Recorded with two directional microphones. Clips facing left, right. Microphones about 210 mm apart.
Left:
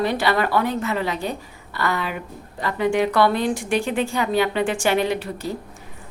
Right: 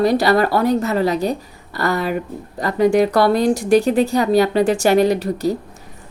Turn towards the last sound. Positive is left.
turn(degrees=-40)  # may be behind; listen again after turning